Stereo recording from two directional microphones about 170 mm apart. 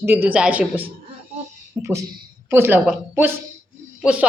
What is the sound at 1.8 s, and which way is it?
Speech, 15° right (ahead or behind).